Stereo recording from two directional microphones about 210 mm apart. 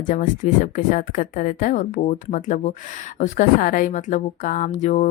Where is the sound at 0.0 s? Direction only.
40° left (ahead or behind).